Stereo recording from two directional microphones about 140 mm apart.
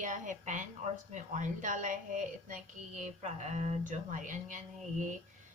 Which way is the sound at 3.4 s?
55° right (ahead or behind).